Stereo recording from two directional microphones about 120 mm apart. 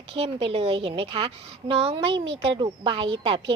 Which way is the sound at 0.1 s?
55° right (ahead or behind).